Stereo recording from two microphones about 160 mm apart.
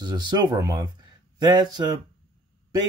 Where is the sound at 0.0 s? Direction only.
25° right (ahead or behind).